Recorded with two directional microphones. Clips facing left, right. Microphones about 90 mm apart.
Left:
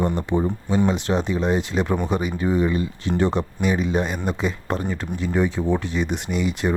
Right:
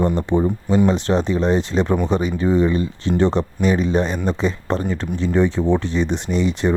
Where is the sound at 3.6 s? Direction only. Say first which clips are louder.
Right 4 dB; 5° left (ahead or behind).